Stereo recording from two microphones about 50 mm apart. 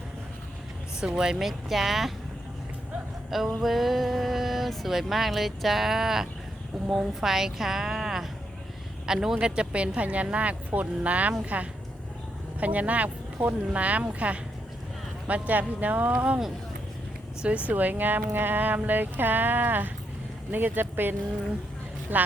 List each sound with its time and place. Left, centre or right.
1.0 s speech: centre
3.2 s music: centre
3.6 s a woman's voice: centre; by 16.4 s right
17.7 s speech: right